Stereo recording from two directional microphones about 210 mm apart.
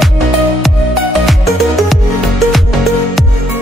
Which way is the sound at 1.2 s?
Centre (ahead or behind).